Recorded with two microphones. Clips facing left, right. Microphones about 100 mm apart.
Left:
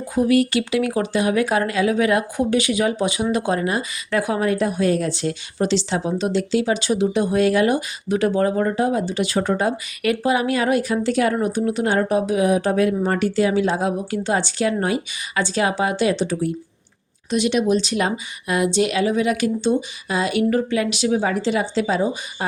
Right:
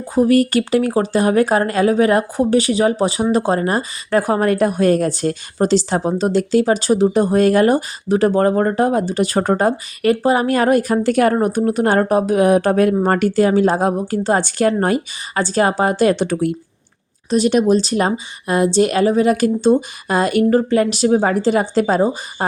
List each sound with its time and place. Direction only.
0.0 s a woman's voice: 40° right (ahead or behind); by 16.5 s 60° right (ahead or behind)
17.2 s a woman's voice: 40° right (ahead or behind)